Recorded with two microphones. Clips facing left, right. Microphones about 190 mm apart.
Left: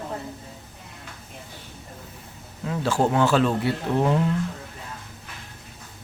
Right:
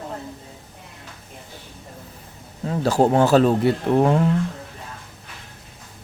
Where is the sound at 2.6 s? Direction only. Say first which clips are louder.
Right 4 dB; 35° right (ahead or behind).